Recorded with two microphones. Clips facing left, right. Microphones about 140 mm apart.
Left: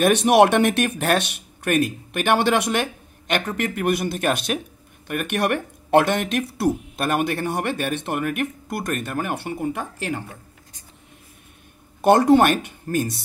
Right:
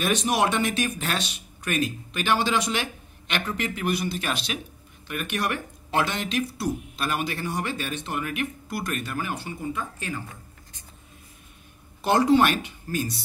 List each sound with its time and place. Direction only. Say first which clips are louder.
0.0 s speech: left 9 dB; 60° left (ahead or behind)
12.0 s speech: left 5 dB; 55° left (ahead or behind)